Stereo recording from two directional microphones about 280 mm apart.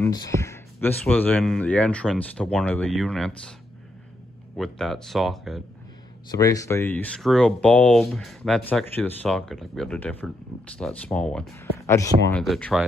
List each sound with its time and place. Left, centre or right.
0.0 s speech: centre
4.6 s speech: centre
6.3 s speech: centre